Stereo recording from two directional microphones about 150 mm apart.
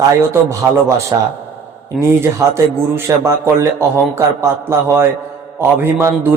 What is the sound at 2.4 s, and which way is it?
Speech, 20° right (ahead or behind).